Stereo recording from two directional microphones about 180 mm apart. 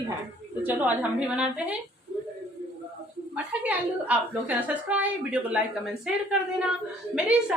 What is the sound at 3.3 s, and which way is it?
A woman's voice, 10° right (ahead or behind).